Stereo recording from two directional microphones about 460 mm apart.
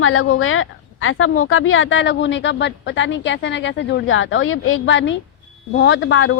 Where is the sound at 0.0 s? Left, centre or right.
Left.